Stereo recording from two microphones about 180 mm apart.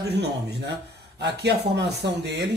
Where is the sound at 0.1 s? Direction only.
70° right (ahead or behind).